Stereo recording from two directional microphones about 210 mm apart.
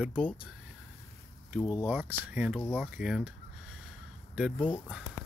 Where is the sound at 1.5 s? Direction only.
5° left (ahead or behind).